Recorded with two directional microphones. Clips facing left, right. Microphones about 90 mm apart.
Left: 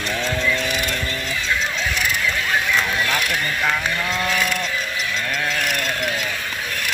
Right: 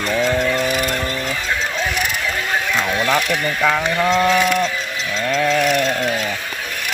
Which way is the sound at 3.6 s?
85° right.